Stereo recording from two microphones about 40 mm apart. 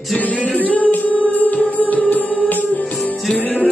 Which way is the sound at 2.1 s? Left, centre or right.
Left.